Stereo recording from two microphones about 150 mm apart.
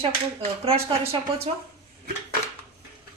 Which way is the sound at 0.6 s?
40° right (ahead or behind).